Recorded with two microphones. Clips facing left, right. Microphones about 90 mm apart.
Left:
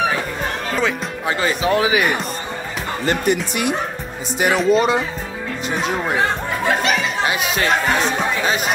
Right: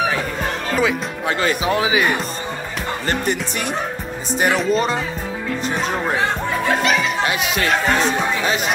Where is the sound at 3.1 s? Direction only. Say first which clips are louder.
Left 4 dB; 40° right (ahead or behind).